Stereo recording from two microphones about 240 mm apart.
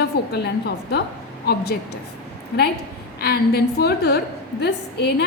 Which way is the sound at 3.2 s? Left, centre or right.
Left.